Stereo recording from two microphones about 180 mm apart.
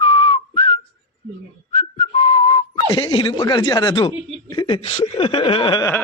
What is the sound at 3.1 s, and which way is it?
Speech, 25° left (ahead or behind).